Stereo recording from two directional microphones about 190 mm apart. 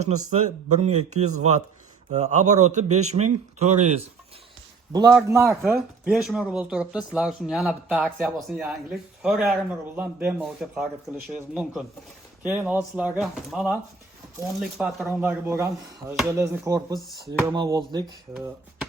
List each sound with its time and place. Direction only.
0.8 s speech: 35° right (ahead or behind)
4.9 s a man's voice: 20° right (ahead or behind)
6.1 s speech: centre (ahead or behind); by 18.0 s 20° right (ahead or behind)